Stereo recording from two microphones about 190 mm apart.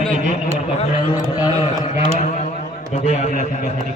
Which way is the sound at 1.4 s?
30° left (ahead or behind).